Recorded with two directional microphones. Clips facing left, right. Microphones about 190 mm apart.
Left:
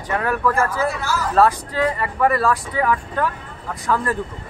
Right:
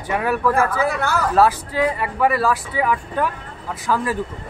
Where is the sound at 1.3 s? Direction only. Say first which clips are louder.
Left 1 dB; 5° right (ahead or behind).